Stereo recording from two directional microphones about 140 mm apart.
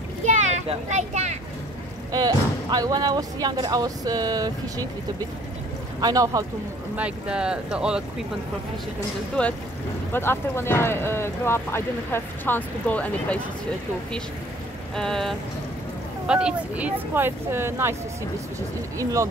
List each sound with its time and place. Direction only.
0.2 s a sound: 55° right (ahead or behind)
2.1 s speech: 25° right (ahead or behind)
5.9 s speech: 25° right (ahead or behind)
7.0 s speech: 5° right (ahead or behind)
9.4 s speech: 10° left (ahead or behind)
15.0 s vehicle: 5° left (ahead or behind)
16.3 s speech: 5° right (ahead or behind)